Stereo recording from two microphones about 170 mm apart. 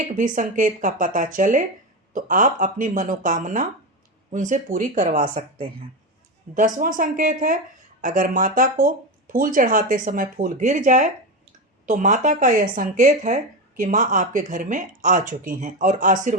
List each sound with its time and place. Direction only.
0.1 s speech: 50° right (ahead or behind)